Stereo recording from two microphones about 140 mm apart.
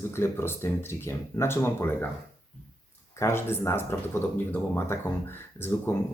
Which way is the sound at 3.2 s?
20° left (ahead or behind).